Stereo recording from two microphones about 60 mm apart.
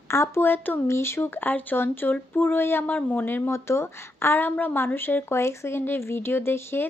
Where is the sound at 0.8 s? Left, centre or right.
Left.